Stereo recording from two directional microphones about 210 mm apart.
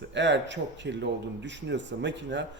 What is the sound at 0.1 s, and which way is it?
Speech, 55° right (ahead or behind).